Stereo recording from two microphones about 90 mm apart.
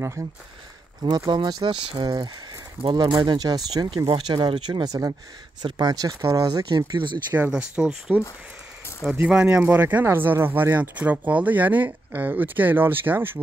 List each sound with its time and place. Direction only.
0.2 s speech: 35° right (ahead or behind)
1.3 s speech: 55° right (ahead or behind)
2.0 s speech: 45° right (ahead or behind)
2.8 s speech: 70° right (ahead or behind)
3.1 s speech: 50° right (ahead or behind)
4.1 s speech: 65° right (ahead or behind)
4.8 s speech: 40° right (ahead or behind)
6.7 s speech: 60° right (ahead or behind)
7.3 s speech: 15° right (ahead or behind)
9.3 s speech: 10° right (ahead or behind)